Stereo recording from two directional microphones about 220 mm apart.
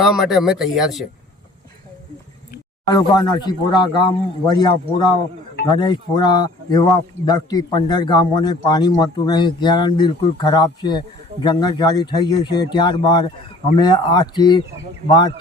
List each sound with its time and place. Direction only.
0.0 s speech: centre (ahead or behind)
2.8 s a man's voice: 15° left (ahead or behind)